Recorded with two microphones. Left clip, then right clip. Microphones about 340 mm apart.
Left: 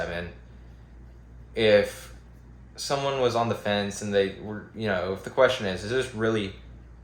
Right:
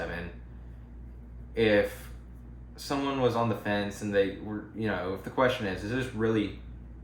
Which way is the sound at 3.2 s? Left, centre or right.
Left.